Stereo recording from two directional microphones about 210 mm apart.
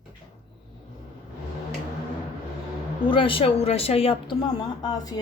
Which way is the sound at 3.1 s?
25° left (ahead or behind).